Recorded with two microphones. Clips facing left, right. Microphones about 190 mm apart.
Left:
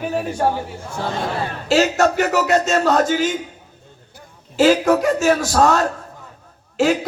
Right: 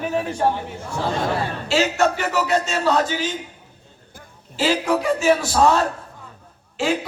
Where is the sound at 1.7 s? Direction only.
40° left (ahead or behind).